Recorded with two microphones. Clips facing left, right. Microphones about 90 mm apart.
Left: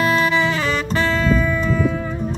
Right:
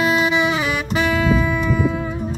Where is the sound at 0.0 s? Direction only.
20° right (ahead or behind).